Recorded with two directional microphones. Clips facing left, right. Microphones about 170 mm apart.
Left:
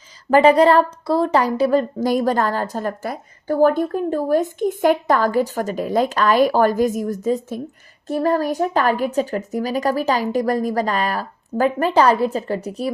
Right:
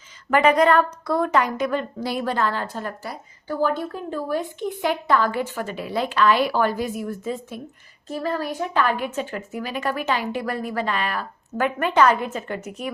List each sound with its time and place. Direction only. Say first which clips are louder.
0.3 s a woman's voice: left 5 dB; 30° left (ahead or behind)
8.0 s a woman's voice: left 7 dB; 50° left (ahead or behind); by 12.9 s 35° left (ahead or behind)